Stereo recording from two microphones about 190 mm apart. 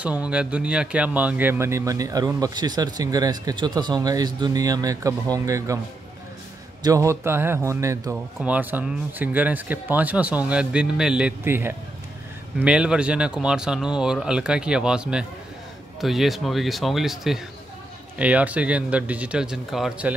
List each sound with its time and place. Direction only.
0.3 s a man's voice: 5° right (ahead or behind)
6.8 s speech: 15° right (ahead or behind)